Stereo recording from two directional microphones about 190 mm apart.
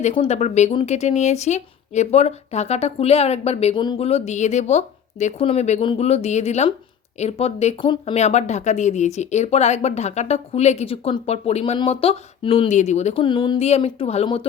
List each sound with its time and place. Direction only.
0.0 s speech: 35° left (ahead or behind)